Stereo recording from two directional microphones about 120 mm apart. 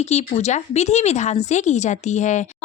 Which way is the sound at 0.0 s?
65° left (ahead or behind).